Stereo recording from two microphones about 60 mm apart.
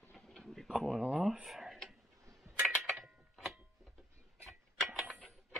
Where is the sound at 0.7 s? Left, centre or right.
Centre.